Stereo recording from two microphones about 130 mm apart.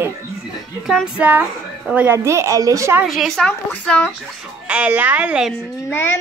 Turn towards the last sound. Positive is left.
turn(degrees=15)  # may be behind; listen again after turning